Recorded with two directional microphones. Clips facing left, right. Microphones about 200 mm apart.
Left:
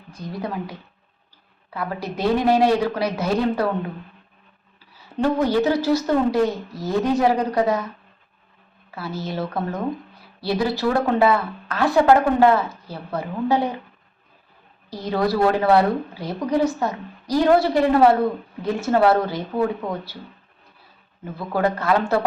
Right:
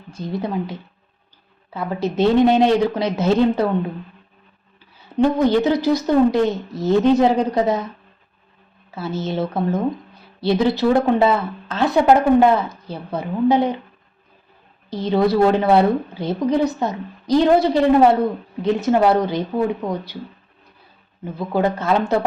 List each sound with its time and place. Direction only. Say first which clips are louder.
0.1 s speech: right 5 dB; 25° right (ahead or behind)
5.0 s speech: right 4 dB; 20° right (ahead or behind)
9.0 s speech: right 4 dB; 25° right (ahead or behind)
14.8 s speech: right 4 dB; 20° right (ahead or behind)
21.3 s speech: right 2 dB; 20° right (ahead or behind)